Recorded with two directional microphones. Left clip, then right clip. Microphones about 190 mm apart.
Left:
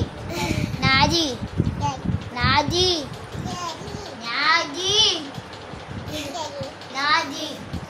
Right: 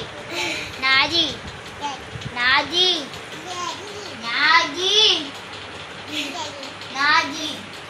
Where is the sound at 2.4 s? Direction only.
65° left (ahead or behind).